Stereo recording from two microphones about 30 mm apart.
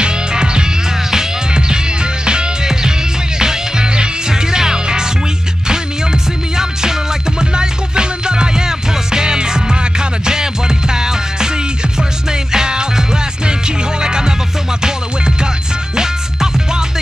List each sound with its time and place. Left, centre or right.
0.0 s music: right
2.2 s music: right
6.5 s music: centre